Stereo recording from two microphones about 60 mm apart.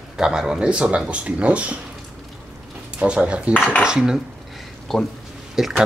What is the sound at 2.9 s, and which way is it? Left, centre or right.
Speech, centre.